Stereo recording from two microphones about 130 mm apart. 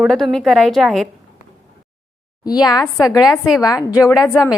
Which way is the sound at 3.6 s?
30° left (ahead or behind).